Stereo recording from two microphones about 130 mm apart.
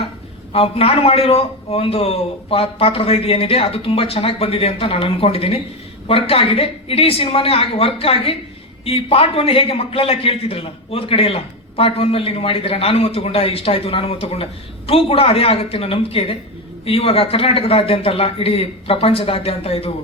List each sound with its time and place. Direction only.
0.5 s a man's voice: 45° left (ahead or behind)